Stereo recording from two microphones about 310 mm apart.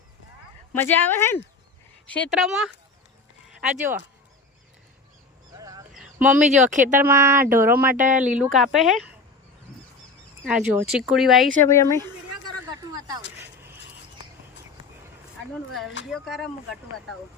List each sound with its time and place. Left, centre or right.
0.8 s speech: centre
5.5 s a sound: centre
6.5 s speech: right
7.0 s speech: centre
7.9 s speech: right
8.5 s speech: centre
10.4 s speech: centre
12.9 s a sound: centre
16.0 s speech: centre